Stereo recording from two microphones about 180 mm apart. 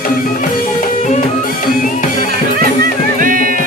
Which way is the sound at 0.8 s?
45° left (ahead or behind).